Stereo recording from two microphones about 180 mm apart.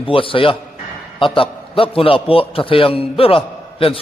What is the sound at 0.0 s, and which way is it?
A man's voice, 30° left (ahead or behind).